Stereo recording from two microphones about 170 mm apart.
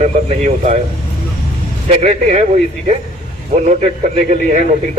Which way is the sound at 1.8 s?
45° right (ahead or behind).